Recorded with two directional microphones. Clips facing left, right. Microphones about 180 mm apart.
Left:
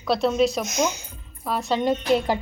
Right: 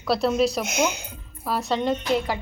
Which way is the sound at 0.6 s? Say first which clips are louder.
Even; 60° right (ahead or behind).